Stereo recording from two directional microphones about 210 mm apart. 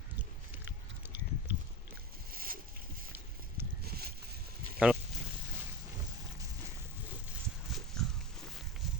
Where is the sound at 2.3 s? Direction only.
45° right (ahead or behind).